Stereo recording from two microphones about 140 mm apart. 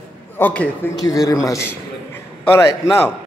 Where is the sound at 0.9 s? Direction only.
25° left (ahead or behind).